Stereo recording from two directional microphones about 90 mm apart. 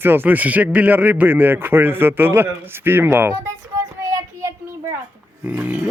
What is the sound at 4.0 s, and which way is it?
Child singing, 35° right (ahead or behind).